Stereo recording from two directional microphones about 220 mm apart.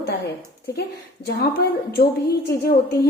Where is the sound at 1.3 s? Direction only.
45° left (ahead or behind).